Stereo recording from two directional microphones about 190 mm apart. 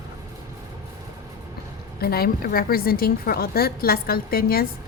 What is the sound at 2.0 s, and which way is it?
A woman's voice, 55° left (ahead or behind).